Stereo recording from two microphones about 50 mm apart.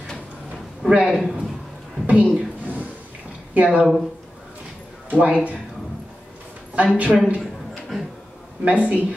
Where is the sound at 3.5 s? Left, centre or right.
Right.